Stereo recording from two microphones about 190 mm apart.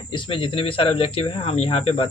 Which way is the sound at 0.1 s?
25° left (ahead or behind).